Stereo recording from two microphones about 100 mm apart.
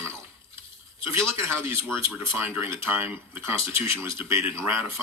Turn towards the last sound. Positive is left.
turn(degrees=-25)  # may be behind; listen again after turning